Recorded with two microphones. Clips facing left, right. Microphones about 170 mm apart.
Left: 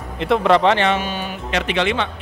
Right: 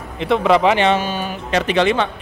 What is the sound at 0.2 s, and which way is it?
Speech, centre (ahead or behind).